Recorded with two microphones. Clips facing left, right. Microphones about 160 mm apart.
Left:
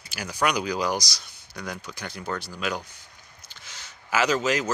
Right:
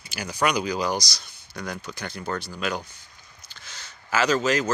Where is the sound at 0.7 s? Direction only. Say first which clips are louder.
Even; 10° left (ahead or behind).